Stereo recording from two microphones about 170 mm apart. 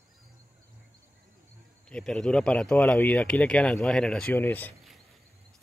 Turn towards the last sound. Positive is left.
turn(degrees=10)  # may be behind; listen again after turning